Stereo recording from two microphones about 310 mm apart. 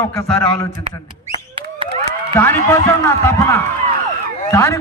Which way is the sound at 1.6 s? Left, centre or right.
Centre.